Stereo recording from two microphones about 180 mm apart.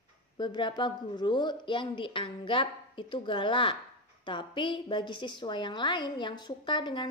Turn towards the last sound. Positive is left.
turn(degrees=25)  # may be behind; listen again after turning